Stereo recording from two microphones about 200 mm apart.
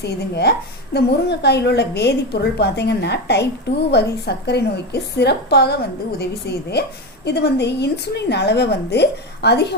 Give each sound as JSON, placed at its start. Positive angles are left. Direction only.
{"t": 0.0, "sound": "a woman's voice", "side_deg": 55}